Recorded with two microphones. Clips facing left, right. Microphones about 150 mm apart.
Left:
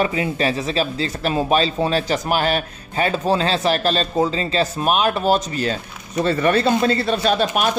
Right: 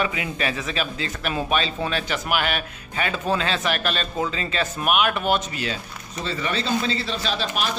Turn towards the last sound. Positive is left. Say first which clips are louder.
# left 8 dB
turn(degrees=50)  # may be behind; listen again after turning